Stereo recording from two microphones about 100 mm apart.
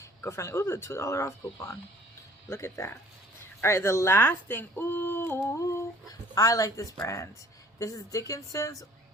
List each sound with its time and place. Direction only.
0.0 s a woman's voice: 30° left (ahead or behind)